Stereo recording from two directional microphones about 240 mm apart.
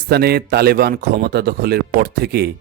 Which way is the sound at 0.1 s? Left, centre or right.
Right.